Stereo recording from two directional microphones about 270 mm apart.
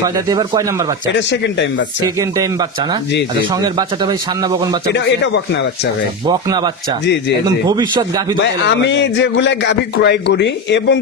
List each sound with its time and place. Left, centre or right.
0.0 s a man's voice: centre
1.1 s a man's voice: left
2.1 s a man's voice: centre
4.8 s a man's voice: left
6.2 s a man's voice: centre
7.7 s a man's voice: centre
8.6 s a man's voice: left